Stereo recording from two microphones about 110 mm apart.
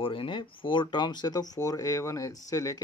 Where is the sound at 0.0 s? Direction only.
50° left (ahead or behind).